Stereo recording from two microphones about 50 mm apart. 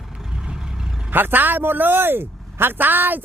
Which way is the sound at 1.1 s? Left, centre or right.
Right.